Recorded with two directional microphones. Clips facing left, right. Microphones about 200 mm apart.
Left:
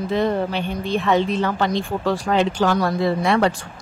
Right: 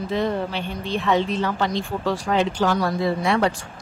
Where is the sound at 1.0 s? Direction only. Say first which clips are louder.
Left 1 dB; 55° left (ahead or behind).